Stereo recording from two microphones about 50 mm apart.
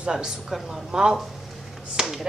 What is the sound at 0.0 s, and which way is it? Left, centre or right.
Speech, centre.